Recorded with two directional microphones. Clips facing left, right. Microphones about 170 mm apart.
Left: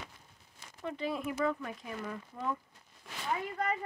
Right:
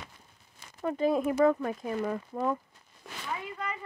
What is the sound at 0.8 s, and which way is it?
Speech, 45° right (ahead or behind).